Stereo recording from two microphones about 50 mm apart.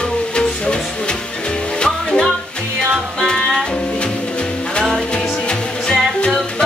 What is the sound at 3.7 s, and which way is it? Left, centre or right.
Music, left.